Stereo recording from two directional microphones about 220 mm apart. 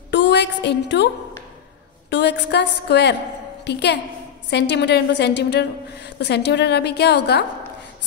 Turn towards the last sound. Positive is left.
turn(degrees=50)  # may be behind; listen again after turning